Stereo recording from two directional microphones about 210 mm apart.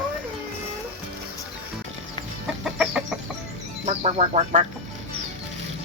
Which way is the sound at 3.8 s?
30° right (ahead or behind).